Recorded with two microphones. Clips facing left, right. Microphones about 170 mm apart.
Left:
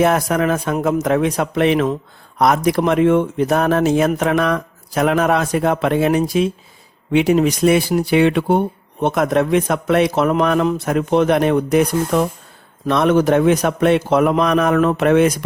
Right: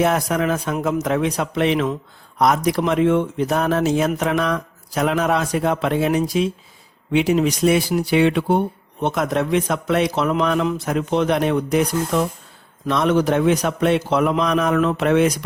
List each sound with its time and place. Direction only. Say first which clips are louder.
0.0 s a man's voice: left 3 dB; 55° left (ahead or behind)